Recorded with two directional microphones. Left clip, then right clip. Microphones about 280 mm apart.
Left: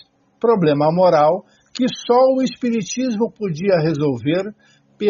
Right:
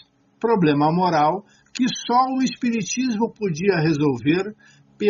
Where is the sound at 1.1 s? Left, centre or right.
Centre.